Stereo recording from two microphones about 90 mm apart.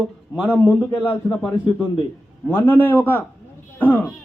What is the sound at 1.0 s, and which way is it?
Speech, 20° left (ahead or behind).